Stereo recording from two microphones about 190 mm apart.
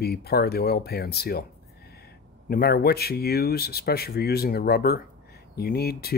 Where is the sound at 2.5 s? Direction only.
50° left (ahead or behind).